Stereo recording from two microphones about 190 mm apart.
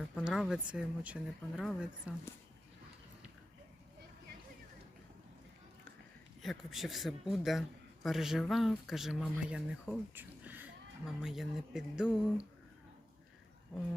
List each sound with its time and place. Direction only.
0.2 s speech: centre (ahead or behind)
6.4 s speech: centre (ahead or behind)